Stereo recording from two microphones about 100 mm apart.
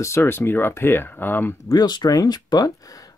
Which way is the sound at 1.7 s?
45° left (ahead or behind).